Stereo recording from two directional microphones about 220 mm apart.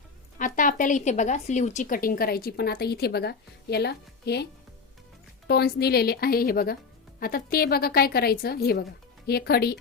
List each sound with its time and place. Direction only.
0.3 s speech: 35° left (ahead or behind)
5.5 s a woman's voice: 45° left (ahead or behind)